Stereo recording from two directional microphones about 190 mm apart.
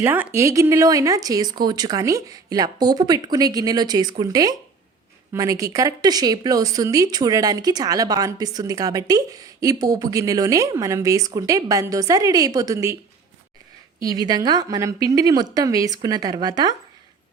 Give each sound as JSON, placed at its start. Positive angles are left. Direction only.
{"t": 0.0, "sound": "a woman's voice", "side_deg": -10}
{"t": 14.0, "sound": "speech", "side_deg": -20}